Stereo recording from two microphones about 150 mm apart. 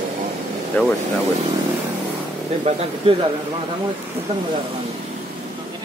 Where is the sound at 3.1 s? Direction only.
40° right (ahead or behind).